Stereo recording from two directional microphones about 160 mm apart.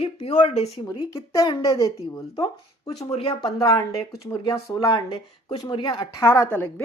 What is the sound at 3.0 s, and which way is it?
Speech, 40° left (ahead or behind).